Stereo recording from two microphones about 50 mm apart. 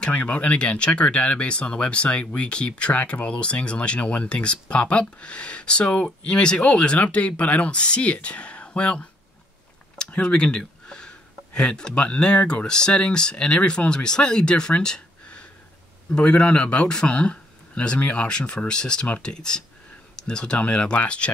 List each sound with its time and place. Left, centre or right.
0.0 s speech: left